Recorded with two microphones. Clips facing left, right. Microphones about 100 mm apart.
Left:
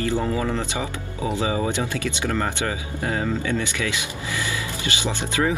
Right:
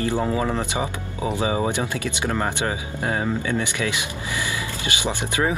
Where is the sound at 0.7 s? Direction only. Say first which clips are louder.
Right 2 dB; 20° right (ahead or behind).